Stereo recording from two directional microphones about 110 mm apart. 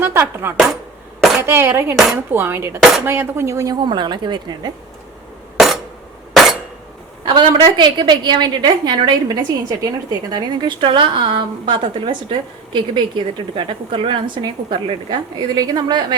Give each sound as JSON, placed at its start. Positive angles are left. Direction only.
{"t": 0.0, "sound": "chopping", "side_deg": -20}
{"t": 1.4, "sound": "a woman's voice", "side_deg": -20}
{"t": 5.5, "sound": "a sound", "side_deg": -5}
{"t": 7.3, "sound": "a woman's voice", "side_deg": -45}